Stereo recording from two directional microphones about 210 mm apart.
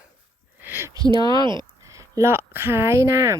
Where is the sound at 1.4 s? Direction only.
20° right (ahead or behind).